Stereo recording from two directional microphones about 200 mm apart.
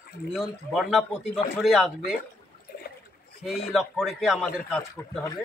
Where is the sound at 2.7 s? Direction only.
50° left (ahead or behind).